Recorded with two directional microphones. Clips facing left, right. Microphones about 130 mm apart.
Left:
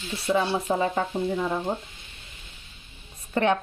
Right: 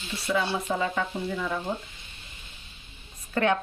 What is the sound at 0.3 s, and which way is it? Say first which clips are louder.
Frying: left 3 dB; 25° left (ahead or behind).